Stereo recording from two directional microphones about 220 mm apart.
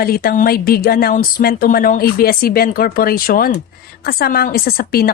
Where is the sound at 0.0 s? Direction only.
40° left (ahead or behind).